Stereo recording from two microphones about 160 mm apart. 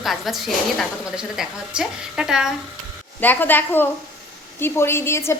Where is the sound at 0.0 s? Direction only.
Centre (ahead or behind).